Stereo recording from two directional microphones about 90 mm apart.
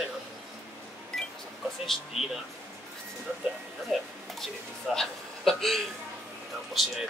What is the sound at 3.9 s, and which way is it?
A man's voice, 5° right (ahead or behind).